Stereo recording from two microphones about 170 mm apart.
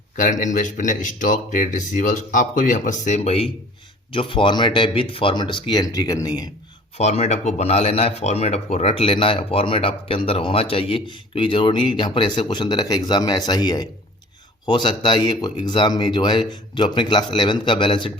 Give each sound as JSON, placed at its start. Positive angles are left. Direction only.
{"t": 0.2, "sound": "speech", "side_deg": 45}
{"t": 6.9, "sound": "speech", "side_deg": 40}